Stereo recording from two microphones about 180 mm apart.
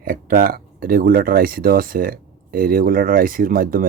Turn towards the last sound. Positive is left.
turn(degrees=-50)  # may be behind; listen again after turning